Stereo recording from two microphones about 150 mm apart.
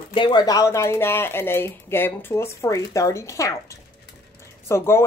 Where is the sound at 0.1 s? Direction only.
30° left (ahead or behind).